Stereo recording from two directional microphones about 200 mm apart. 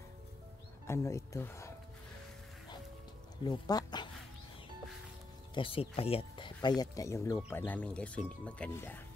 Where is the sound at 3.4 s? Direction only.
20° left (ahead or behind).